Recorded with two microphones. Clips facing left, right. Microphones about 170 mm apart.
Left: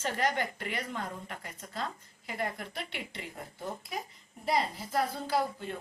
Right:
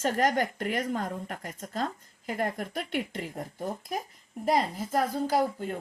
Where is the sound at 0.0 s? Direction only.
45° right (ahead or behind).